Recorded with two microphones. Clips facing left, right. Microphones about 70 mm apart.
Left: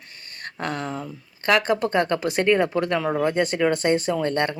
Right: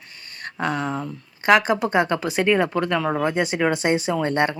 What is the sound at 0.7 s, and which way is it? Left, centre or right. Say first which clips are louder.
Speech: right 3 dB; right.